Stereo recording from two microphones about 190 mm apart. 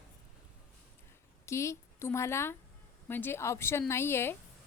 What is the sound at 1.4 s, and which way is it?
A woman's voice, 15° left (ahead or behind).